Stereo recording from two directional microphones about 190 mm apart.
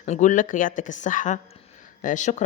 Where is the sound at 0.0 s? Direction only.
40° left (ahead or behind).